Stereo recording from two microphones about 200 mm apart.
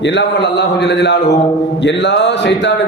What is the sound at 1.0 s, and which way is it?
Speech, 60° left (ahead or behind).